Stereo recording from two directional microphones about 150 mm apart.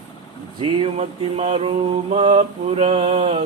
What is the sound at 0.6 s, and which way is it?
Mantra, 40° right (ahead or behind).